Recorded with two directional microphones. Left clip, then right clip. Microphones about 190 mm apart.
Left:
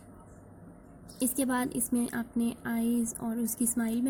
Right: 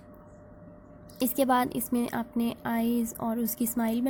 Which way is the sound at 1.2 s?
35° right (ahead or behind).